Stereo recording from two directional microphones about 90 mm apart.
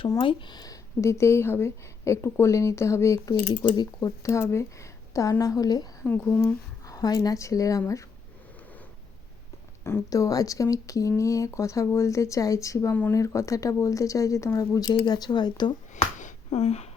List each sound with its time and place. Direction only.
0.2 s speech: 70° left (ahead or behind); by 3.4 s 40° left (ahead or behind)
3.6 s speech: 50° left (ahead or behind)
4.2 s speech: 35° left (ahead or behind)
6.1 s speech: 25° left (ahead or behind)
6.8 s speech: 45° left (ahead or behind)
10.1 s speech: 40° left (ahead or behind)
12.9 s speech: 20° left (ahead or behind)
13.1 s speech: 35° left (ahead or behind); by 15.7 s 55° left (ahead or behind)